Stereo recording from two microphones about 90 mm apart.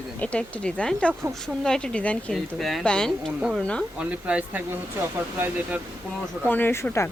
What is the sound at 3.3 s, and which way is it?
Speech, 10° right (ahead or behind).